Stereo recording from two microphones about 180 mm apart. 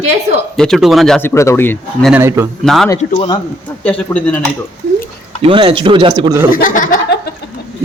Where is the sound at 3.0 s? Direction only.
30° left (ahead or behind).